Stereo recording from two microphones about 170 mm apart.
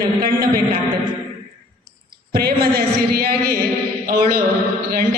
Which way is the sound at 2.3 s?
65° right (ahead or behind).